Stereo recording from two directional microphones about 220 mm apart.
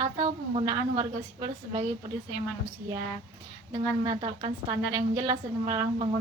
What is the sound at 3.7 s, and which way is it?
A woman's voice, 20° right (ahead or behind).